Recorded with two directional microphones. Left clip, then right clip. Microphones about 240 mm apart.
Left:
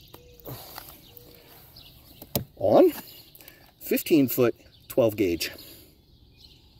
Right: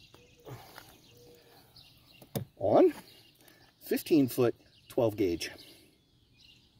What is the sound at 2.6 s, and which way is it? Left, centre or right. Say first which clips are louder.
Wild animals: left 5 dB; left.